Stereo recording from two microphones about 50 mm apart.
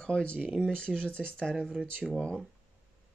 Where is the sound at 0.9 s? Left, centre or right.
Left.